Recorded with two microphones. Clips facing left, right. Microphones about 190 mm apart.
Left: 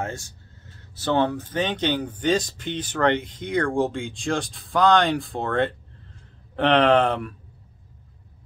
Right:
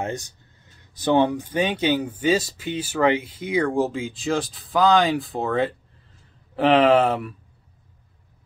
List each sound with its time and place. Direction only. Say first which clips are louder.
0.0 s speech: right 3 dB; 20° right (ahead or behind)